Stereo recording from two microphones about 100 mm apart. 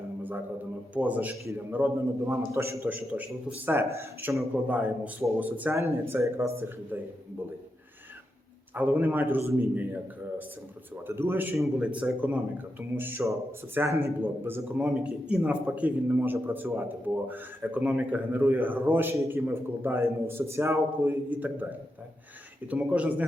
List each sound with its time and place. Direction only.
0.2 s a sound: 20° right (ahead or behind)
0.9 s a man's voice: 15° right (ahead or behind)
3.7 s a man's voice: 25° right (ahead or behind)
4.7 s a man's voice: 15° right (ahead or behind)
5.7 s a man's voice: 25° right (ahead or behind)
8.7 s a man's voice: 15° right (ahead or behind)